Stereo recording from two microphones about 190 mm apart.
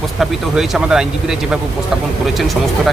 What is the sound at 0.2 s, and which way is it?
Speech, centre (ahead or behind).